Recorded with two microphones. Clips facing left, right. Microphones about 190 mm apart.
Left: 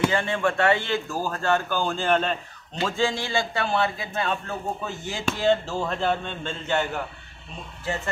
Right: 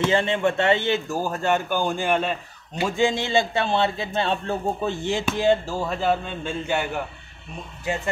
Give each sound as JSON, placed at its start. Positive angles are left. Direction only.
{"t": 0.1, "sound": "speech", "side_deg": -20}
{"t": 5.2, "sound": "speech", "side_deg": -10}